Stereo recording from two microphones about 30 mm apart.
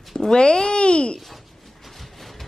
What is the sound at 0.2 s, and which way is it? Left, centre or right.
A child's voice, left.